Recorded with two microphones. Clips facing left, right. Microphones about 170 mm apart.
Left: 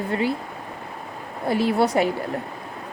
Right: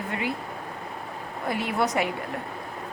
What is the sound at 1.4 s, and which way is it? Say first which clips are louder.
Speech: left 6 dB; 30° left (ahead or behind).